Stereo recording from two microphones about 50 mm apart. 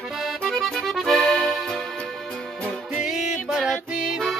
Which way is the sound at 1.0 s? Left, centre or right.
Centre.